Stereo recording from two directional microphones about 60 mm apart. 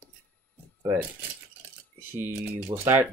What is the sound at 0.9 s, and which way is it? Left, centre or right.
Speech, right.